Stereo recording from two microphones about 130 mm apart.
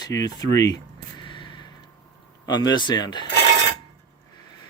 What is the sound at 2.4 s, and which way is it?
Speech, 30° left (ahead or behind).